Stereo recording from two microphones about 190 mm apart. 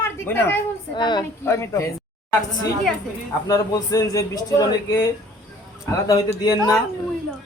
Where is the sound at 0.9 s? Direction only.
25° left (ahead or behind).